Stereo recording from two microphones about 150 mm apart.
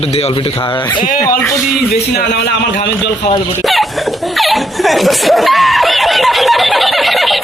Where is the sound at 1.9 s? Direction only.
90° left.